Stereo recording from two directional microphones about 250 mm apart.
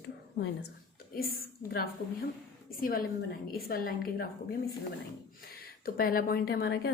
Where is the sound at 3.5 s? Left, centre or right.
Left.